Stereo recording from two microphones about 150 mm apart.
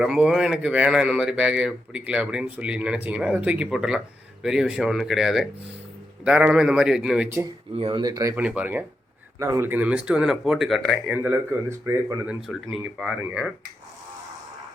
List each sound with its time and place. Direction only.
0.0 s speech: 5° right (ahead or behind)
7.8 s speech: 35° right (ahead or behind)
8.4 s speech: 10° right (ahead or behind)
11.1 s speech: 15° right (ahead or behind)
12.2 s speech: 5° right (ahead or behind)